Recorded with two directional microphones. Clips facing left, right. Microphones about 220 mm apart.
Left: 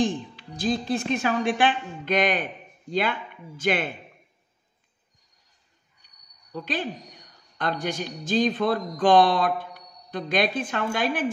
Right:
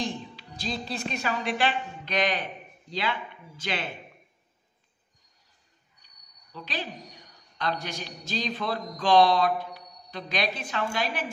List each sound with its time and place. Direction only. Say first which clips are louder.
0.0 s a man's voice: left 7 dB; 50° left (ahead or behind)
6.5 s a man's voice: left 6 dB; 50° left (ahead or behind)